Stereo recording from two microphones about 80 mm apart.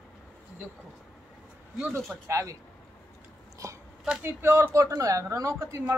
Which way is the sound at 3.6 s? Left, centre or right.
Right.